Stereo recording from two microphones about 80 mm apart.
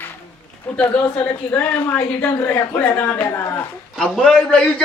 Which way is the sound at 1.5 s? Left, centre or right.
Left.